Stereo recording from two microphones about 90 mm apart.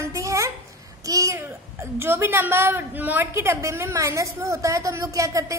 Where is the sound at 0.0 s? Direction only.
35° right (ahead or behind).